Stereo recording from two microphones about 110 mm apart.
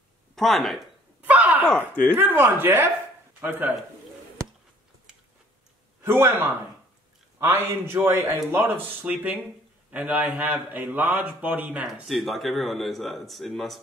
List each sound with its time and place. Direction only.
0.4 s speech: centre (ahead or behind)
1.2 s a sound: 15° right (ahead or behind)
1.8 s speech: 15° left (ahead or behind)
2.1 s a man's voice: 20° right (ahead or behind)
6.0 s a man's voice: 20° right (ahead or behind)
11.9 s speech: centre (ahead or behind)